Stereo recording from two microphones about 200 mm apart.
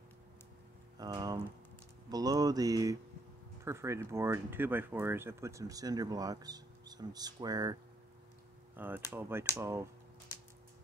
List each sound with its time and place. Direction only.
0.9 s a sound: 20° right (ahead or behind)
2.0 s speech: 20° right (ahead or behind)
8.7 s speech: 10° right (ahead or behind)